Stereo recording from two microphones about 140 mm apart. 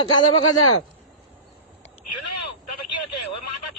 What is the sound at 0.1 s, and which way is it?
Speech, 30° left (ahead or behind).